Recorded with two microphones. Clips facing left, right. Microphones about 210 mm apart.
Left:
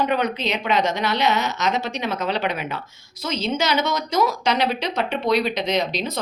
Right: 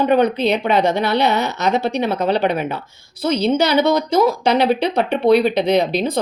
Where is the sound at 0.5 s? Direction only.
35° right (ahead or behind).